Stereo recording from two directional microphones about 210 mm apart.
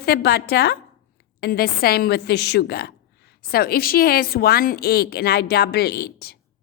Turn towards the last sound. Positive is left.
turn(degrees=50)  # may be behind; listen again after turning